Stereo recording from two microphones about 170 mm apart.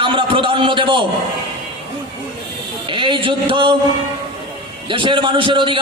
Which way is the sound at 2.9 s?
30° right (ahead or behind).